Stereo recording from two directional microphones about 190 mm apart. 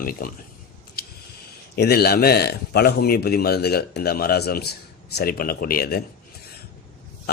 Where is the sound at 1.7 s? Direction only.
55° left (ahead or behind).